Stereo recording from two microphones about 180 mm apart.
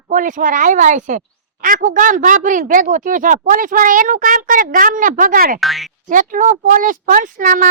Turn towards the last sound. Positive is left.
turn(degrees=-50)  # may be behind; listen again after turning